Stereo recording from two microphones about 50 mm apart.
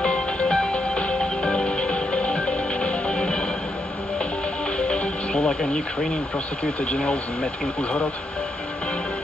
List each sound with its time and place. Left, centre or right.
0.0 s music: left
4.7 s music: left
5.4 s speech: centre
5.7 s speech: left